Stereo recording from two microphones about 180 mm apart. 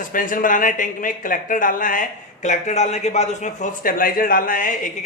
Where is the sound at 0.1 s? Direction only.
50° left (ahead or behind).